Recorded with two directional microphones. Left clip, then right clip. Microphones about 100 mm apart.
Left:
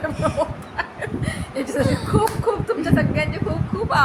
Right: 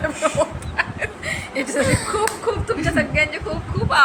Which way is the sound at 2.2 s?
50° left (ahead or behind).